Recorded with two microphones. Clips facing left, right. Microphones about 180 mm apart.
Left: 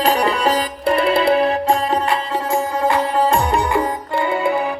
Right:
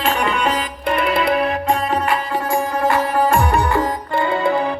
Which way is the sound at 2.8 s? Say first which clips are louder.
Even; 20° left (ahead or behind).